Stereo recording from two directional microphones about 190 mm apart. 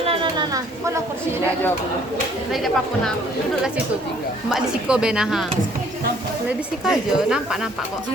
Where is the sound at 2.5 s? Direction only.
Centre (ahead or behind).